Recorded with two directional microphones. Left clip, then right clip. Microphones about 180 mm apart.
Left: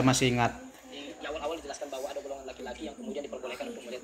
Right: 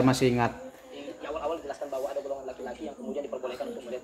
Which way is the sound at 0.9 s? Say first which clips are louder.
Right 2 dB; 35° right (ahead or behind).